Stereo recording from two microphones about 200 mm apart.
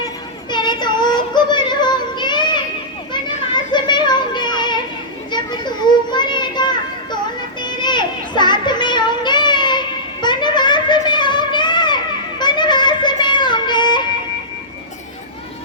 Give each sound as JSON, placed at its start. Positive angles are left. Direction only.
{"t": 0.5, "sound": "music", "side_deg": 20}
{"t": 3.1, "sound": "children playing", "side_deg": 20}
{"t": 7.6, "sound": "child singing", "side_deg": 20}
{"t": 12.4, "sound": "music", "side_deg": 20}